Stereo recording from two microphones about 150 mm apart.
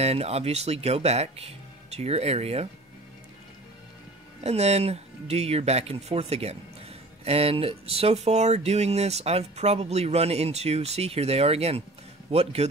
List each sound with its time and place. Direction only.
0.0 s speech: 45° right (ahead or behind)
4.4 s speech: 45° right (ahead or behind)